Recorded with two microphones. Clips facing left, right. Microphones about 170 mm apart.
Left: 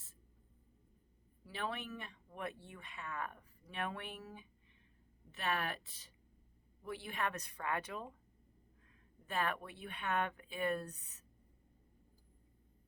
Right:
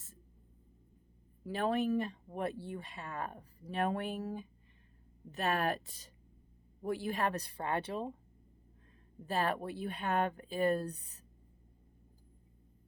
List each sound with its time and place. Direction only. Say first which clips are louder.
1.5 s speech: right 11 dB; 40° right (ahead or behind)
9.2 s speech: right 5 dB; 35° right (ahead or behind)